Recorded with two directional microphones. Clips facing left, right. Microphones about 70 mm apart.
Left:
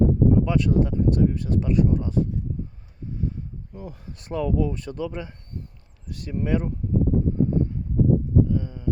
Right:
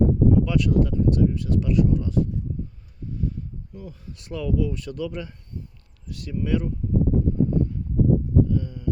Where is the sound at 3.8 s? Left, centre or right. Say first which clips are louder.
Left 2 dB; left.